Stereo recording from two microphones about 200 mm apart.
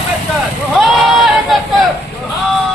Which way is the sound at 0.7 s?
Centre (ahead or behind).